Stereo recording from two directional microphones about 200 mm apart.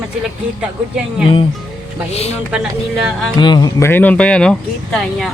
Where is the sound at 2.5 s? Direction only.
5° right (ahead or behind).